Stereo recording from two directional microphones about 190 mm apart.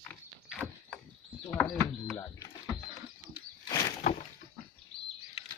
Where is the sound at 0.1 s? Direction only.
5° left (ahead or behind).